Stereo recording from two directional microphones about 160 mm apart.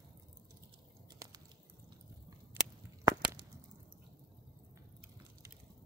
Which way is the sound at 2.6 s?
15° right (ahead or behind).